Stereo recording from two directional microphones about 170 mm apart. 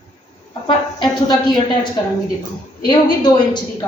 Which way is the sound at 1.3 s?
25° left (ahead or behind).